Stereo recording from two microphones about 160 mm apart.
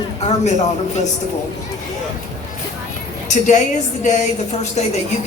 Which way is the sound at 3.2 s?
50° left (ahead or behind).